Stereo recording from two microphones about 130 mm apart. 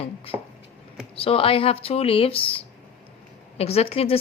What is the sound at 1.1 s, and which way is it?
A woman's voice, 45° left (ahead or behind).